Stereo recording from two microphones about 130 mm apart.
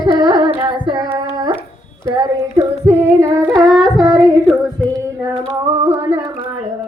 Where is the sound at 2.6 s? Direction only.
15° right (ahead or behind).